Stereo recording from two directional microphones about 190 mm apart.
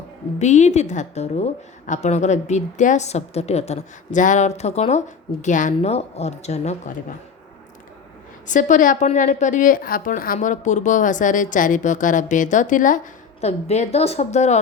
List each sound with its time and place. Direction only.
0.3 s a woman's voice: 40° left (ahead or behind)
8.4 s a woman's voice: 40° left (ahead or behind)